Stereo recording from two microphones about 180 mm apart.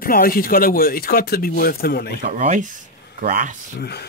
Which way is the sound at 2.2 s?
45° right (ahead or behind).